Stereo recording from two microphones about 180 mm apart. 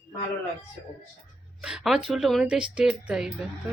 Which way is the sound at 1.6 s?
5° right (ahead or behind).